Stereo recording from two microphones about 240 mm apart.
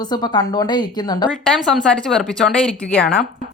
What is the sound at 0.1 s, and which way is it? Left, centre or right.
Speech, centre.